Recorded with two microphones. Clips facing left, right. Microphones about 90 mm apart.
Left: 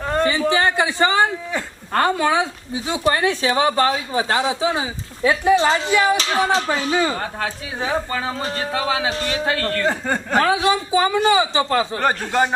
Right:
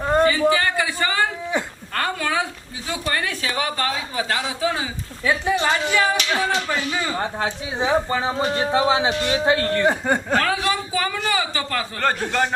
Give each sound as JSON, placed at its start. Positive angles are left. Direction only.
{"t": 0.0, "sound": "a sound", "side_deg": -20}
{"t": 0.5, "sound": "a sound", "side_deg": 25}
{"t": 1.9, "sound": "a woman's voice", "side_deg": 25}
{"t": 5.5, "sound": "a man's voice", "side_deg": 30}
{"t": 5.9, "sound": "speech", "side_deg": 15}
{"t": 6.1, "sound": "speech", "side_deg": 35}
{"t": 7.2, "sound": "speech", "side_deg": -20}
{"t": 10.3, "sound": "a man's voice", "side_deg": 20}